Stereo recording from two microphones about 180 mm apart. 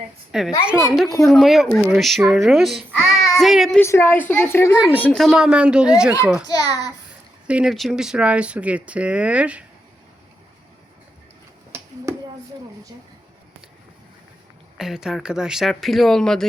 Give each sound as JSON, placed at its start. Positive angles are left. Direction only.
{"t": 0.3, "sound": "speech", "side_deg": -5}
{"t": 3.8, "sound": "a woman's voice", "side_deg": 15}
{"t": 6.5, "sound": "a child's voice", "side_deg": 20}
{"t": 7.4, "sound": "speech", "side_deg": -5}
{"t": 12.1, "sound": "a sound", "side_deg": -15}
{"t": 14.8, "sound": "speech", "side_deg": 0}